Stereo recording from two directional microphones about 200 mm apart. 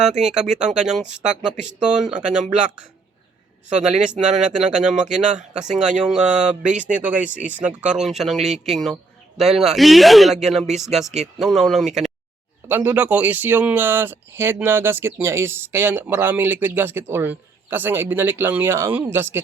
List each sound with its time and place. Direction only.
0.2 s speech: 5° right (ahead or behind)
4.1 s speech: 40° right (ahead or behind)
4.4 s speech: 5° right (ahead or behind)
5.3 s speech: 35° right (ahead or behind)
6.0 s speech: 5° right (ahead or behind)